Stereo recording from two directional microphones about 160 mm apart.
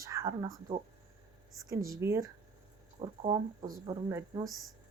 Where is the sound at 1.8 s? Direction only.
20° right (ahead or behind).